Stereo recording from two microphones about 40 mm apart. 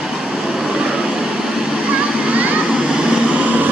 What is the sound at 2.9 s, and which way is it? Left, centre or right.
Vehicle, right.